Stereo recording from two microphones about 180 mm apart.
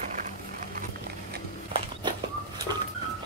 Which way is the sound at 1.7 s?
30° right (ahead or behind).